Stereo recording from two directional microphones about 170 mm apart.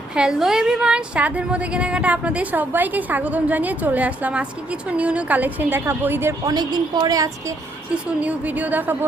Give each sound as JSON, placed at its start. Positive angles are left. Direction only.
{"t": 0.1, "sound": "a woman's voice", "side_deg": -5}
{"t": 6.5, "sound": "a woman's voice", "side_deg": -25}
{"t": 8.0, "sound": "a woman's voice", "side_deg": -10}